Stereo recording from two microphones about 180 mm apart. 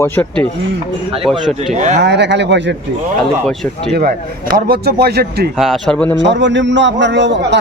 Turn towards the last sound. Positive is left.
turn(degrees=-80)